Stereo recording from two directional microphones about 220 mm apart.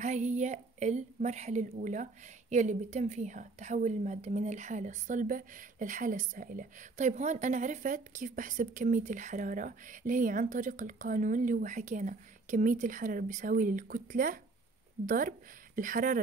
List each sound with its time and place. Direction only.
0.0 s a woman's voice: 35° right (ahead or behind)